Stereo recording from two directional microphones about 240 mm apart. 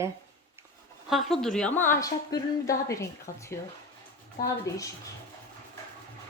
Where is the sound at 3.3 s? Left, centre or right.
Left.